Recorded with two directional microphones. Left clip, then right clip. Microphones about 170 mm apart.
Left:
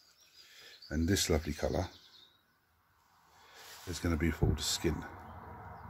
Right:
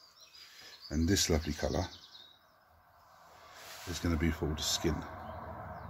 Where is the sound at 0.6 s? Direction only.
35° left (ahead or behind).